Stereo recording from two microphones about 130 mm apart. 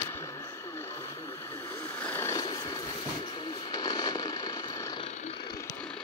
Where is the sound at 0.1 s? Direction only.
20° left (ahead or behind).